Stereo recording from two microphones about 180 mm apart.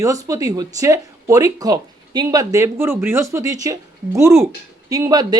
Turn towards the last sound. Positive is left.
turn(degrees=-20)  # may be behind; listen again after turning